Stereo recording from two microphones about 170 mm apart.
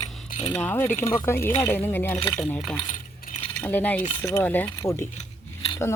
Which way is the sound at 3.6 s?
10° left (ahead or behind).